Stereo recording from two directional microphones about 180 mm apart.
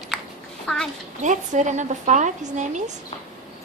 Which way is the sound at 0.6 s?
Centre (ahead or behind).